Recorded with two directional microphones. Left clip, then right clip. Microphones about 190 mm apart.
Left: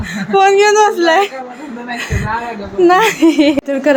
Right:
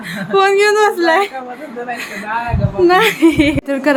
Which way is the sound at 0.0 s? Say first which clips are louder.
Left 2 dB; centre (ahead or behind).